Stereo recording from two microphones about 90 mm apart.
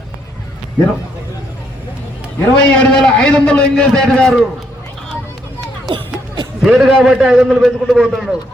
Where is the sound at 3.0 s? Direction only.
15° left (ahead or behind).